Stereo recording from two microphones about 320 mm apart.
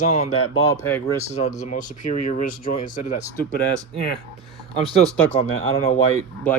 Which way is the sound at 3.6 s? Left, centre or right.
Centre.